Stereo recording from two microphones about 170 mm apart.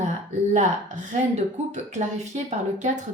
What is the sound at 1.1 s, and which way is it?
Speech, 45° right (ahead or behind).